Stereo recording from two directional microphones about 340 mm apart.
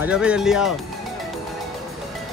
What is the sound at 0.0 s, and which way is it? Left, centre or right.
Speech, centre.